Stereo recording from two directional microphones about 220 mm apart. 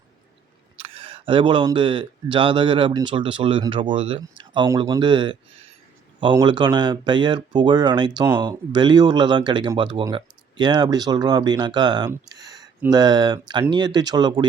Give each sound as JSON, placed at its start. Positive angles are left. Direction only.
{"t": 0.8, "sound": "speech", "side_deg": -25}